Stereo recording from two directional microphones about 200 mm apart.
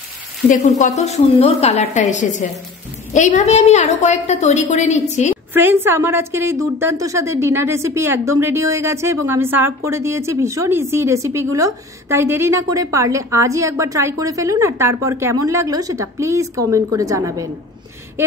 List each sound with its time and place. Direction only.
0.5 s a woman's voice: 35° left (ahead or behind)
5.5 s a woman's voice: 10° right (ahead or behind)